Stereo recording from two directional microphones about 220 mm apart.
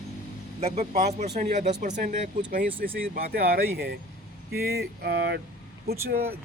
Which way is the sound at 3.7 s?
45° right (ahead or behind).